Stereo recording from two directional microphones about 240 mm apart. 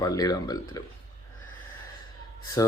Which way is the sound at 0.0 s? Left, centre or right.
Centre.